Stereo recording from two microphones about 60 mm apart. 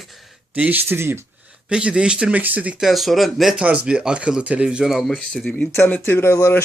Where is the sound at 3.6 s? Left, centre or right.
Centre.